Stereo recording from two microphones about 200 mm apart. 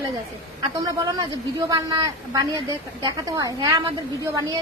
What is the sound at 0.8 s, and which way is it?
A woman's voice, 20° right (ahead or behind).